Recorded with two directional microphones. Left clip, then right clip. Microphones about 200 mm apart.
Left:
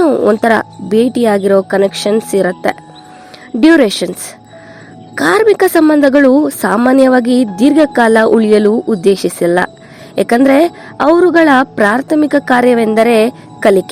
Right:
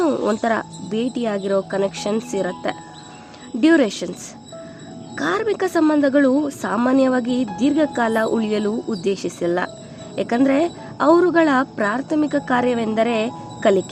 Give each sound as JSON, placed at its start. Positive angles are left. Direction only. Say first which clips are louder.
{"t": 0.0, "sound": "speech", "louder": "left 10 dB", "side_deg": 30}
{"t": 5.1, "sound": "a woman's voice", "louder": "left 12 dB", "side_deg": 45}